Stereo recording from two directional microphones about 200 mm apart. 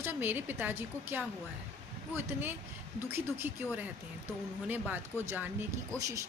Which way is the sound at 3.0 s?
10° right (ahead or behind).